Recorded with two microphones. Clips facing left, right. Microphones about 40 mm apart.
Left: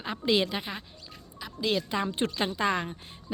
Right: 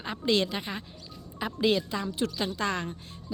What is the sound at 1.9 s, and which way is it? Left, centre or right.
Speech, left.